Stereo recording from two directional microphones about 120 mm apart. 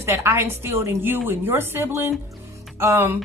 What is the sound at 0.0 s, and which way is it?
A woman's voice, 25° right (ahead or behind).